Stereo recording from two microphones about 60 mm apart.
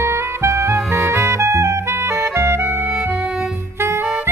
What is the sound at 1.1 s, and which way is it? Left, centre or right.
Music, right.